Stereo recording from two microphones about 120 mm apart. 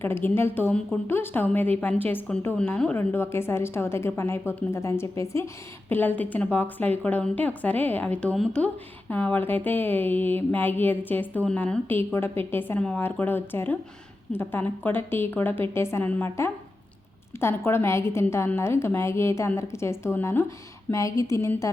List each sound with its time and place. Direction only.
0.0 s a woman's voice: 20° left (ahead or behind)